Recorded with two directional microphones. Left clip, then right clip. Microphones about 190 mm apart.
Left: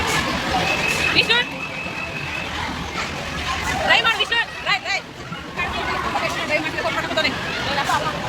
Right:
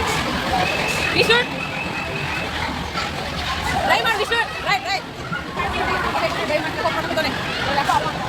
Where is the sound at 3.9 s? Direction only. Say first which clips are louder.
Left 2 dB; 35° right (ahead or behind).